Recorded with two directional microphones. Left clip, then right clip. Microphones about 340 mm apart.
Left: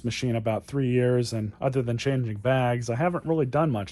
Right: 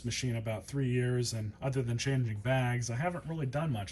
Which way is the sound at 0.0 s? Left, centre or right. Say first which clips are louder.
Left 9 dB; centre.